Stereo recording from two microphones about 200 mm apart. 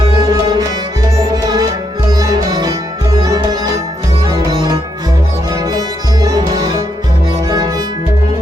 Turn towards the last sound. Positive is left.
turn(degrees=-20)  # may be behind; listen again after turning